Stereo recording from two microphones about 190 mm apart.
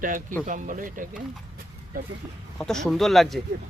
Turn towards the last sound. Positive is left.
turn(degrees=0)  # may be behind; listen again after turning